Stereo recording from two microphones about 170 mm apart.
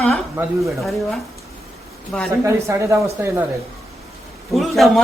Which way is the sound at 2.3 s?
15° right (ahead or behind).